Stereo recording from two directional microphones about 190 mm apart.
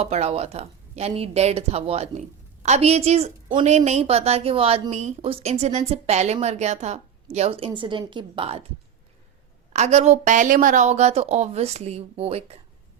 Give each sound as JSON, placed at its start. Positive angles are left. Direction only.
{"t": 0.0, "sound": "a woman's voice", "side_deg": -35}
{"t": 9.7, "sound": "a woman's voice", "side_deg": -35}